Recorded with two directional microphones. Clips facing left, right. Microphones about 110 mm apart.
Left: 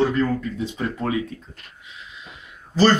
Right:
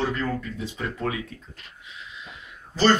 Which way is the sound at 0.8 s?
35° left (ahead or behind).